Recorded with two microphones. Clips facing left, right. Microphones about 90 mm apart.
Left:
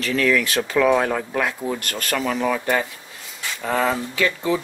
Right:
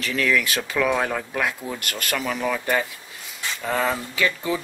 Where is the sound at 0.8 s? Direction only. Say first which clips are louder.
Left 4 dB; 15° left (ahead or behind).